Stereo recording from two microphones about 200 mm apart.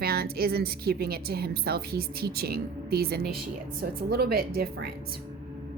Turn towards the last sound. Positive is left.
turn(degrees=-50)  # may be behind; listen again after turning